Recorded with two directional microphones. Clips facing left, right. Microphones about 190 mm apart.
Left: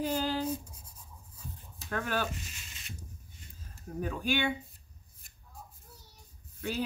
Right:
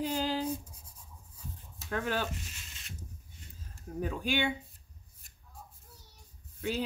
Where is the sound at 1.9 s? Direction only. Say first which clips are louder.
Even; 20° right (ahead or behind).